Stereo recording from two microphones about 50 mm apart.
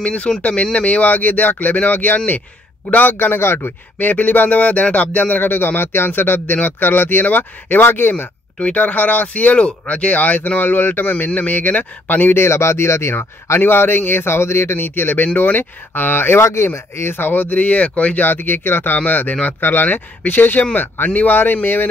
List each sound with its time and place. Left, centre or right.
0.0 s speech: left
4.0 s speech: left
8.5 s speech: left
9.6 s speech: left
12.4 s speech: left
13.6 s speech: left
16.6 s speech: left